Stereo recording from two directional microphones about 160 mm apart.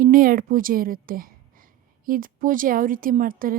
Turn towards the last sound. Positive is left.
turn(degrees=-60)  # may be behind; listen again after turning